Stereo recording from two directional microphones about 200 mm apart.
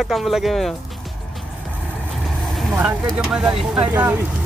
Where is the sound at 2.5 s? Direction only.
Centre (ahead or behind).